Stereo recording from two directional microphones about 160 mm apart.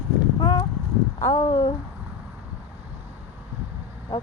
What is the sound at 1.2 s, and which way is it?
Speech, 25° left (ahead or behind).